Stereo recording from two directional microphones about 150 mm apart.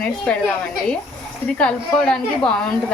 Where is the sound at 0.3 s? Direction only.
5° left (ahead or behind).